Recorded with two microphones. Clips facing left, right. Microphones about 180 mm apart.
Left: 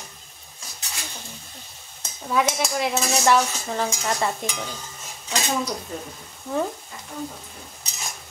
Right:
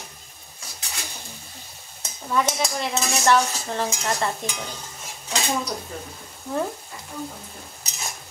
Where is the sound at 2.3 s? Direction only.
5° left (ahead or behind).